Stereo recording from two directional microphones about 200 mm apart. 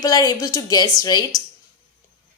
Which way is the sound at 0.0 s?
20° left (ahead or behind).